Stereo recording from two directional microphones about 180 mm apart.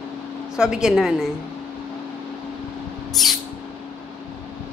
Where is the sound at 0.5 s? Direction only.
5° right (ahead or behind).